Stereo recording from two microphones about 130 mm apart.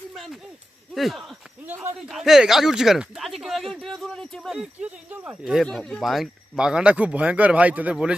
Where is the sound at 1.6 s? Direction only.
20° right (ahead or behind).